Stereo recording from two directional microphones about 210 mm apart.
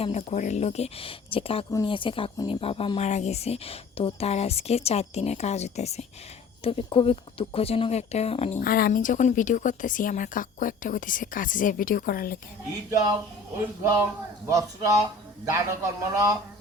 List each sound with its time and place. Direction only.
0.0 s speech: 30° left (ahead or behind)
8.6 s speech: 45° left (ahead or behind)
14.4 s a man's voice: 15° right (ahead or behind)